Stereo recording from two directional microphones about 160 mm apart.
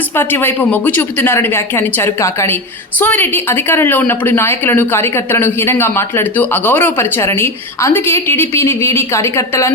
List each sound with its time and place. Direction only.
0.2 s a woman's voice: 15° left (ahead or behind)